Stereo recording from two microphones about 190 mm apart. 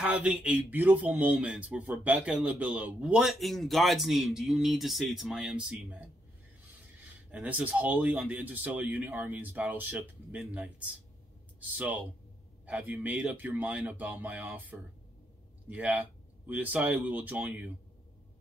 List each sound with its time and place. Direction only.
0.0 s speech: 5° right (ahead or behind)
7.2 s speech: 10° right (ahead or behind)